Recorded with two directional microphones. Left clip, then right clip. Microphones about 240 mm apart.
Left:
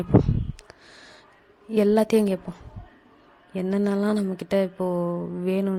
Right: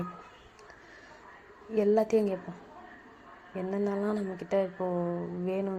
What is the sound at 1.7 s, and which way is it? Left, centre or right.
Speech, left.